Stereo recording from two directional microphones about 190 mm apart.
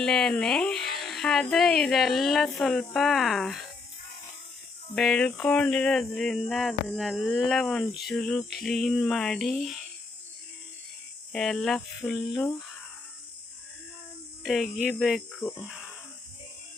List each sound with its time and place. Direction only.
0.0 s speech: 5° left (ahead or behind)
4.9 s speech: 5° left (ahead or behind)
11.3 s speech: 5° left (ahead or behind)
12.5 s a sound: 5° left (ahead or behind)
14.4 s speech: centre (ahead or behind)